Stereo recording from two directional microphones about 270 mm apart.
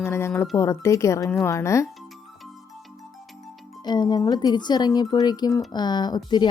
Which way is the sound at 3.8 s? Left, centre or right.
Centre.